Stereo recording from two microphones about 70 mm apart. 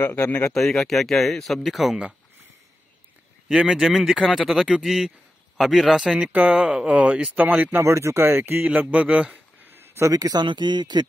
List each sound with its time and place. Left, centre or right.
0.2 s speech: left
0.5 s speech: centre
3.7 s speech: centre; by 7.8 s right
7.8 s speech: right
8.6 s speech: centre
9.7 s a sound: right
10.1 s speech: right